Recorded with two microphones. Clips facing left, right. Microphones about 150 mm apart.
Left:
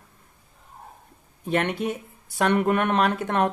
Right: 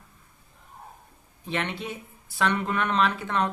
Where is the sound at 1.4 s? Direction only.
45° left (ahead or behind).